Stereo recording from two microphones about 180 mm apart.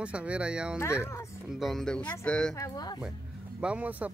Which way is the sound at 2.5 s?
20° left (ahead or behind).